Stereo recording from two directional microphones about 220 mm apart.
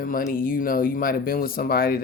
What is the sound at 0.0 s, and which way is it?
Speech, 40° left (ahead or behind).